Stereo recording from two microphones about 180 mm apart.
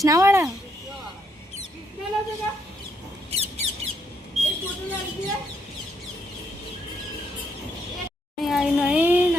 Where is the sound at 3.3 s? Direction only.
35° right (ahead or behind).